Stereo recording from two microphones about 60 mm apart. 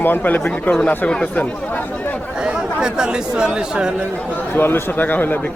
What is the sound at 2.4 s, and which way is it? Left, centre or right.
Speech, centre.